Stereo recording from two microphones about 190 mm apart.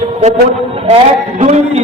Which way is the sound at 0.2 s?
30° right (ahead or behind).